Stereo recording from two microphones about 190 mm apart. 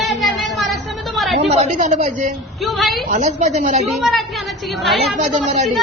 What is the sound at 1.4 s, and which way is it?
Speech, 35° right (ahead or behind).